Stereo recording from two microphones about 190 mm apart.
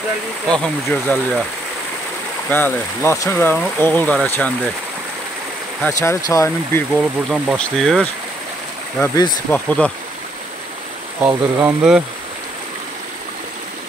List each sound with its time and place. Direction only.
0.8 s speech: 10° left (ahead or behind)
2.5 s speech: 10° left (ahead or behind)
5.8 s speech: 15° left (ahead or behind)
7.0 s speech: centre (ahead or behind)
9.0 s speech: 15° left (ahead or behind)
11.2 s speech: 5° right (ahead or behind)